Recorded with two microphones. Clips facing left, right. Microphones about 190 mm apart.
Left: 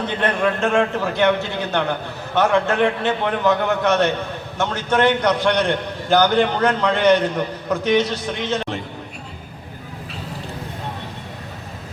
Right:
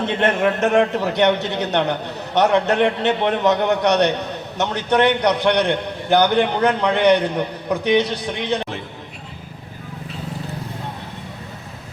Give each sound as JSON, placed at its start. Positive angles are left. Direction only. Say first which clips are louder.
{"t": 0.0, "sound": "a man's voice", "louder": "right 2 dB", "side_deg": -25}